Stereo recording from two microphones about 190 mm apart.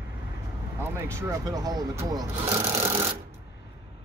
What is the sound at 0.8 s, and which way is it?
Speech, 15° right (ahead or behind).